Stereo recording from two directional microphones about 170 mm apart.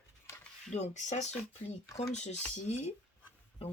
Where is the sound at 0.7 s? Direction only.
40° left (ahead or behind).